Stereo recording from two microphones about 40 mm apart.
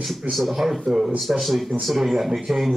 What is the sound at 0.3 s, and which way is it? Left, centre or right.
Speech, centre.